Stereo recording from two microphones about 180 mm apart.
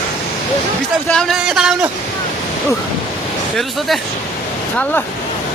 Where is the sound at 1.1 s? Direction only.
Centre (ahead or behind).